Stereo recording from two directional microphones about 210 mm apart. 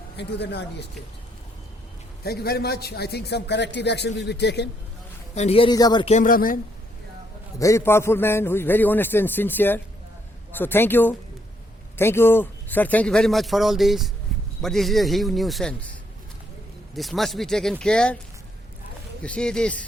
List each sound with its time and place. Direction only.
0.2 s a man's voice: 55° left (ahead or behind)
2.2 s a man's voice: 50° left (ahead or behind)
5.3 s speech: 30° left (ahead or behind)
6.1 s speech: 40° left (ahead or behind)
7.6 s a man's voice: 15° left (ahead or behind)
19.2 s speech: 5° left (ahead or behind)